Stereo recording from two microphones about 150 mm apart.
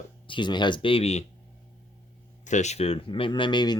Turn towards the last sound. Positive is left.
turn(degrees=30)  # may be behind; listen again after turning